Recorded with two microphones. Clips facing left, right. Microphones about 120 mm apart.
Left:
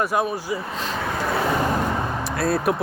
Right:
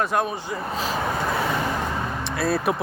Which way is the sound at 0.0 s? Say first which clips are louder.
Left 1 dB; 5° left (ahead or behind).